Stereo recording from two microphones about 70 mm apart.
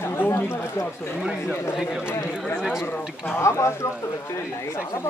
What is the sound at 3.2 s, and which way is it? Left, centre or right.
Speech, left.